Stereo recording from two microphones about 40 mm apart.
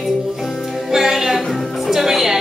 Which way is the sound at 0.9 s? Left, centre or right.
Centre.